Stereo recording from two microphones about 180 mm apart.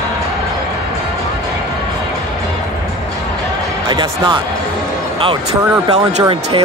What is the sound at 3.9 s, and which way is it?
Speech, 25° right (ahead or behind).